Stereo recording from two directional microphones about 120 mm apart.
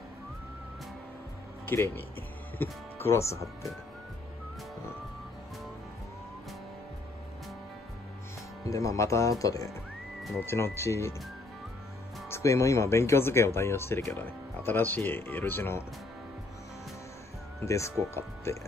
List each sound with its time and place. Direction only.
1.7 s speech: 15° left (ahead or behind)
8.6 s speech: 25° left (ahead or behind)
12.3 s speech: 25° left (ahead or behind)
17.6 s speech: 25° left (ahead or behind)